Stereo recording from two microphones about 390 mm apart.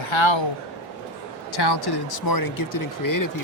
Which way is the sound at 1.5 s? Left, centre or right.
Left.